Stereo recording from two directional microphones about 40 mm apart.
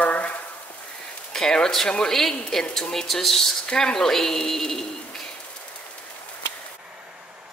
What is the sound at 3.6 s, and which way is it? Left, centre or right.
Speech, centre.